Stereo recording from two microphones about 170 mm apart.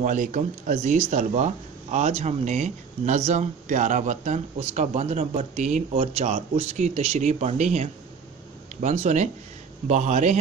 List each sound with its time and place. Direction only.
0.0 s speech: 45° right (ahead or behind)